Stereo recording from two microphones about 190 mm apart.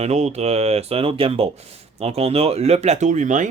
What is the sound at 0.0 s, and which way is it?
Speech, 35° right (ahead or behind).